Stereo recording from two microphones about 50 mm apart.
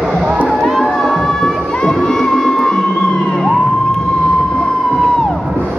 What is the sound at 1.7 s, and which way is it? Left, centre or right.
Music, centre.